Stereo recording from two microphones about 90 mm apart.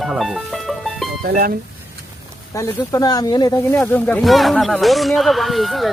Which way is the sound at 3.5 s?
35° left (ahead or behind).